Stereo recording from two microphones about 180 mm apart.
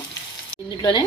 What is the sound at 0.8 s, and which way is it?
Speech, 25° left (ahead or behind).